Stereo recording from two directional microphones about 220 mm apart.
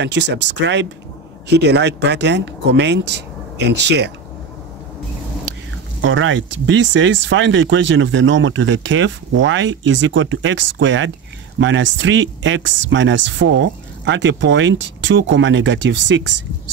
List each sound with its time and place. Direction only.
0.0 s speech: 55° right (ahead or behind)
5.9 s speech: 60° right (ahead or behind)